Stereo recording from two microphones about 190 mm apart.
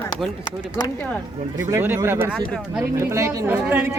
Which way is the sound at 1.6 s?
10° right (ahead or behind).